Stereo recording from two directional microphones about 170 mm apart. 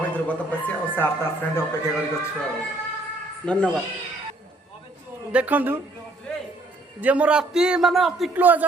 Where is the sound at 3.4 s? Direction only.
5° left (ahead or behind).